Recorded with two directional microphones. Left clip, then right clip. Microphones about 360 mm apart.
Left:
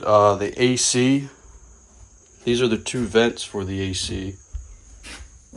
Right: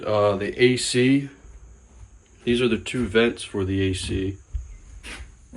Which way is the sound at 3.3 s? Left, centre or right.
Left.